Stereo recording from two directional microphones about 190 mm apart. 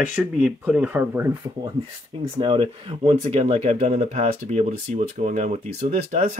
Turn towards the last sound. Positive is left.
turn(degrees=-35)  # may be behind; listen again after turning